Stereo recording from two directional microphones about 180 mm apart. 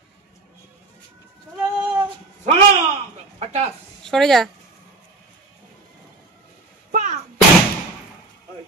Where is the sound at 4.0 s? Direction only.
Centre (ahead or behind).